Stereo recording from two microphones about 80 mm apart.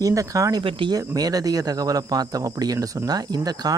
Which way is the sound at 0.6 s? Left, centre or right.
Right.